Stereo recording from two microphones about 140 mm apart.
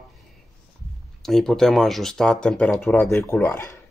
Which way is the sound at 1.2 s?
Centre (ahead or behind).